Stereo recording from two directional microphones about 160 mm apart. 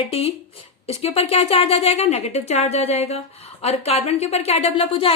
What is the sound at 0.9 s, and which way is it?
A woman's voice, 40° left (ahead or behind).